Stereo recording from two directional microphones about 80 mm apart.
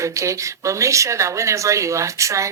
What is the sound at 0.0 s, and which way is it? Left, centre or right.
Speech, right.